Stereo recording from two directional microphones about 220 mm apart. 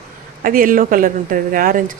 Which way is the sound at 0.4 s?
40° right (ahead or behind).